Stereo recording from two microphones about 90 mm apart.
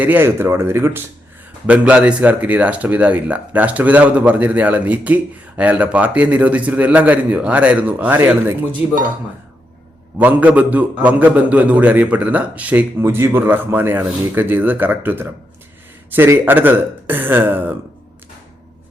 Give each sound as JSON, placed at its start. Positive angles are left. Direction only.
{"t": 0.0, "sound": "speech", "side_deg": -25}
{"t": 1.6, "sound": "speech", "side_deg": -15}
{"t": 10.2, "sound": "speech", "side_deg": -20}
{"t": 13.0, "sound": "speech", "side_deg": -30}